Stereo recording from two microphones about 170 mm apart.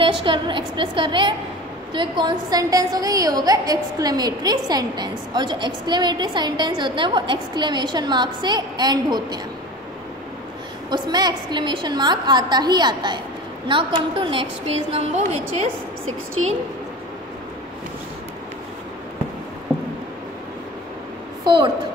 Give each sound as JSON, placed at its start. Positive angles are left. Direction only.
{"t": 0.0, "sound": "a woman's voice", "side_deg": -30}
{"t": 10.9, "sound": "a woman's voice", "side_deg": -25}
{"t": 21.5, "sound": "a woman's voice", "side_deg": -25}